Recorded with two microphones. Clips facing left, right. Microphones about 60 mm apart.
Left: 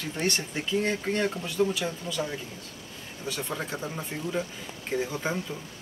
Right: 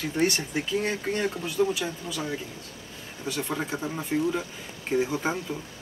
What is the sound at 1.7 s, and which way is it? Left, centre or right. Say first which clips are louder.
Speech: right 1 dB; centre.